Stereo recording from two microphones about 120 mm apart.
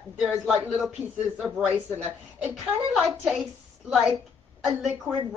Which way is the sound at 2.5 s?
Centre (ahead or behind).